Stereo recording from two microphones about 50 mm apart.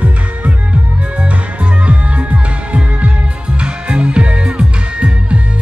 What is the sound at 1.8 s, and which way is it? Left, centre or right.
Music, right.